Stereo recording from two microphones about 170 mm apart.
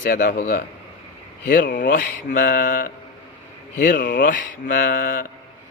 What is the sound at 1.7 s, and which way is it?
Mantra, 55° left (ahead or behind).